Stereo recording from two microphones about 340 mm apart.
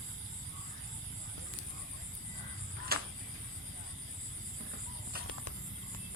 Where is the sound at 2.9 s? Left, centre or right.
Right.